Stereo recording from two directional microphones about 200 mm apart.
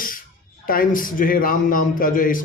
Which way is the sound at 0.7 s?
45° left (ahead or behind).